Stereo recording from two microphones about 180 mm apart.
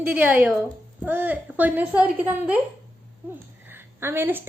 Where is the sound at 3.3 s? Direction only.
10° right (ahead or behind).